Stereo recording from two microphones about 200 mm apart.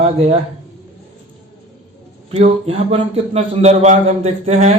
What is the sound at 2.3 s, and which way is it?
A man's voice, 30° right (ahead or behind).